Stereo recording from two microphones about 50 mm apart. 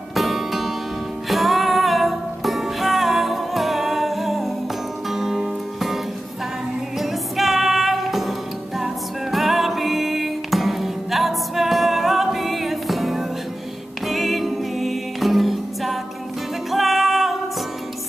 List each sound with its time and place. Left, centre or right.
0.1 s music: centre
7.0 s music: centre